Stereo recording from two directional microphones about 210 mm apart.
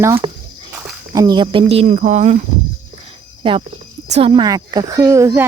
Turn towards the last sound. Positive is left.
turn(degrees=-15)  # may be behind; listen again after turning